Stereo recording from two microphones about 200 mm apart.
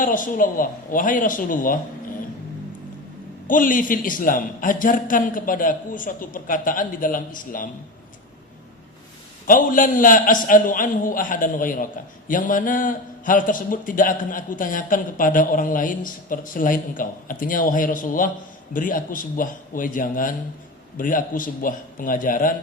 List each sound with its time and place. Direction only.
0.0 s a man's voice: 40° left (ahead or behind)
3.4 s a man's voice: 40° left (ahead or behind)
9.5 s a man's voice: 40° left (ahead or behind)